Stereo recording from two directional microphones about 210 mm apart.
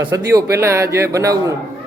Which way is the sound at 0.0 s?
15° right (ahead or behind).